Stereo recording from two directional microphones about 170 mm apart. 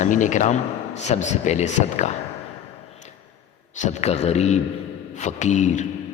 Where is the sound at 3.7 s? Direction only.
45° left (ahead or behind).